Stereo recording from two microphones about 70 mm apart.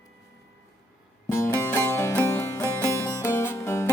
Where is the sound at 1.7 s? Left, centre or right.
Left.